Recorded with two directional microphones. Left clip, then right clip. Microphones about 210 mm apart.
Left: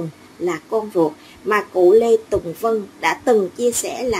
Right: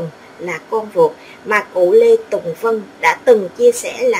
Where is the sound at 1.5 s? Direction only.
35° left (ahead or behind).